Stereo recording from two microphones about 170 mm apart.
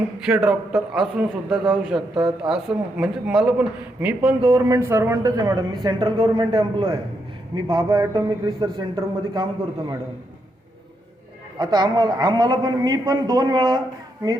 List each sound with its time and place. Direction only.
0.3 s a man's voice: 5° right (ahead or behind)
4.4 s speech: 30° right (ahead or behind)
4.7 s a man's voice: 15° right (ahead or behind)
11.5 s a man's voice: 25° right (ahead or behind)